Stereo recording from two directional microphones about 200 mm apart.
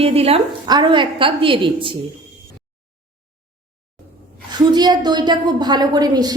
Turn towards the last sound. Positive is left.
turn(degrees=-20)  # may be behind; listen again after turning